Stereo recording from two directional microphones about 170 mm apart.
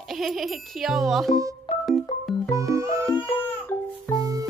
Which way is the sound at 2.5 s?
20° right (ahead or behind).